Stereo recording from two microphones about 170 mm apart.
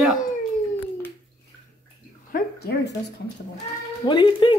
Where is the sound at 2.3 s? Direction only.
70° left (ahead or behind).